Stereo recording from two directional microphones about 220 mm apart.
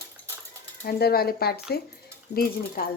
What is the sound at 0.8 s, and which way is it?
Speech, 45° left (ahead or behind).